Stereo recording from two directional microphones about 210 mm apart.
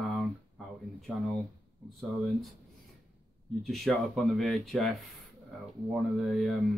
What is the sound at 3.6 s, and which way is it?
Speech, centre (ahead or behind).